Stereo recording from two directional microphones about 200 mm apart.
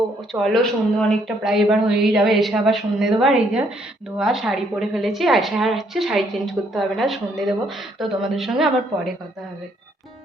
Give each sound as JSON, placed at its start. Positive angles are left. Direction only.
{"t": 0.3, "sound": "a woman's voice", "side_deg": 0}